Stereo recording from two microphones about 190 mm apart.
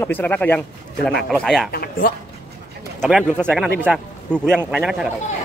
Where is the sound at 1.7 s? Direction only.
50° left (ahead or behind).